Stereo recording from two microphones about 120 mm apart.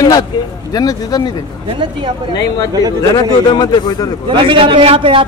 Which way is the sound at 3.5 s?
35° left (ahead or behind).